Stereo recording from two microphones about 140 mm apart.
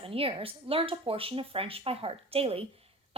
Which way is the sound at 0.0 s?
40° right (ahead or behind).